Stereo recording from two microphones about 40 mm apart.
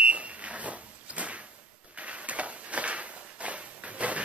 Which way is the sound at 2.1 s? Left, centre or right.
Right.